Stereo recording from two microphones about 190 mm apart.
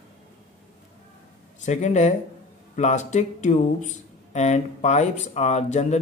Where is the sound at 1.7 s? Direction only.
40° left (ahead or behind).